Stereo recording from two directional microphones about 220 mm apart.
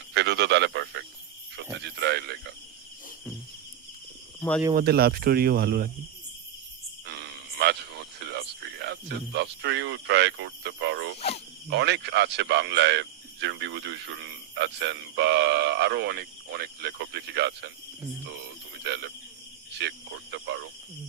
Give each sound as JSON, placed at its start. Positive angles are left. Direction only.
{"t": 0.1, "sound": "speech", "side_deg": -50}
{"t": 4.7, "sound": "speech", "side_deg": -45}
{"t": 7.1, "sound": "a sound", "side_deg": -50}
{"t": 11.7, "sound": "speech", "side_deg": -50}
{"t": 18.8, "sound": "speech", "side_deg": -50}